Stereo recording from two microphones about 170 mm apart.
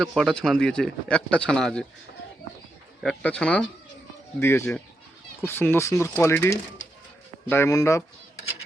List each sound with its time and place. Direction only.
0.0 s speech: centre (ahead or behind)
3.0 s speech: 5° left (ahead or behind)